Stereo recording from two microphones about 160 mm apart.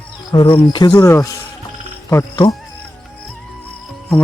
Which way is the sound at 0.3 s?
30° left (ahead or behind).